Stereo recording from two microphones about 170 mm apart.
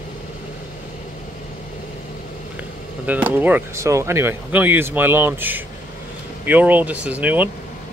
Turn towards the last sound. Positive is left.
turn(degrees=-10)  # may be behind; listen again after turning